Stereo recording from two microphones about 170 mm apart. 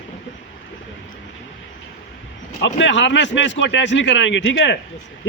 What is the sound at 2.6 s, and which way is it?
A man's voice, 90° left.